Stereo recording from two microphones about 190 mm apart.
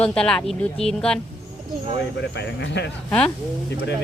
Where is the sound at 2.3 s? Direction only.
65° left (ahead or behind).